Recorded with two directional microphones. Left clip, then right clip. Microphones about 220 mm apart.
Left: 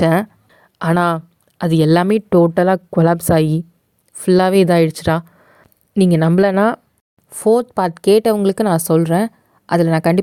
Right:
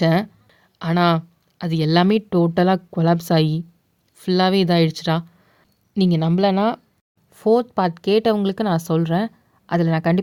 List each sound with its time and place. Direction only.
0.0 s speech: 40° left (ahead or behind)